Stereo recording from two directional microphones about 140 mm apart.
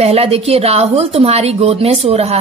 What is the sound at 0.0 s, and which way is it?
A woman's voice, 45° right (ahead or behind).